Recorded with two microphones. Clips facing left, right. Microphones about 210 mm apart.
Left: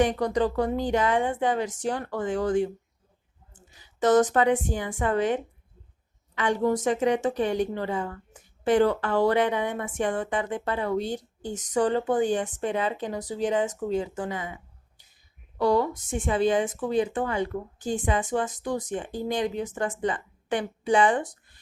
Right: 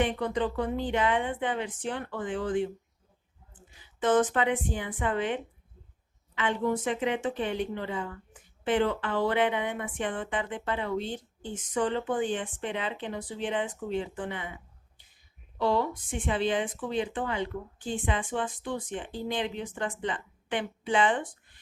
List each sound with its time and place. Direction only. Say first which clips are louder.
0.0 s speech: left 5 dB; 40° left (ahead or behind)
15.5 s speech: left 4 dB; 45° left (ahead or behind)